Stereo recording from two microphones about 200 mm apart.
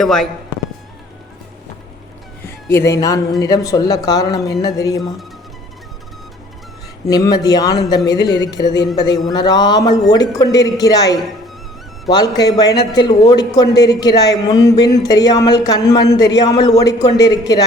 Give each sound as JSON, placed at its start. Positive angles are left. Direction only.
{"t": 0.0, "sound": "a man's voice", "side_deg": 0}
{"t": 2.6, "sound": "speech", "side_deg": 15}
{"t": 7.1, "sound": "speech", "side_deg": 20}
{"t": 12.0, "sound": "speech", "side_deg": 20}